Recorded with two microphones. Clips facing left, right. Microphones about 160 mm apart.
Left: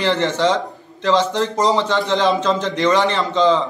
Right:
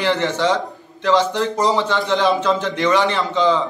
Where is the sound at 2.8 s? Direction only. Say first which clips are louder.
Left 2 dB; 20° left (ahead or behind).